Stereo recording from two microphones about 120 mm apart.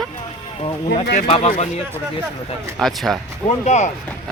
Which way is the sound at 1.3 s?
50° left (ahead or behind).